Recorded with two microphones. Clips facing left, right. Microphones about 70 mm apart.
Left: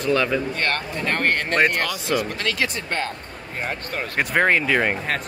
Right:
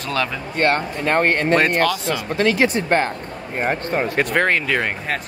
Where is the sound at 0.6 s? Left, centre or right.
Right.